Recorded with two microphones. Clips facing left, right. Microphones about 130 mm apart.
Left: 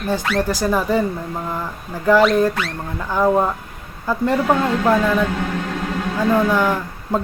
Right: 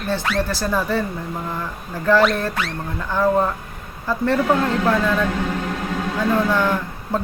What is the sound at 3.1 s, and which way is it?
Speech, 15° left (ahead or behind).